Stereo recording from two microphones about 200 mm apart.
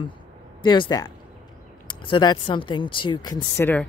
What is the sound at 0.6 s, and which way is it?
Speech, 20° left (ahead or behind).